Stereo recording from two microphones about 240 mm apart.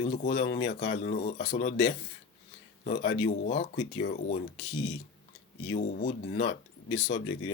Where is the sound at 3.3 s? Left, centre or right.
Left.